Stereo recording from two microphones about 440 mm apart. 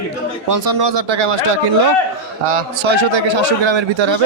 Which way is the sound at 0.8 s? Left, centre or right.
Right.